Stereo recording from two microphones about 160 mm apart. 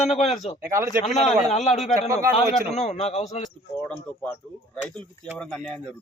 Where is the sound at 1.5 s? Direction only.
45° left (ahead or behind).